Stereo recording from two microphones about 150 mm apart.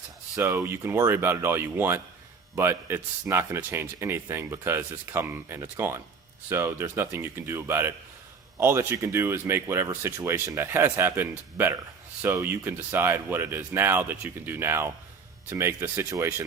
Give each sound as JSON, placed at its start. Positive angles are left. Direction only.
{"t": 0.3, "sound": "speech", "side_deg": -15}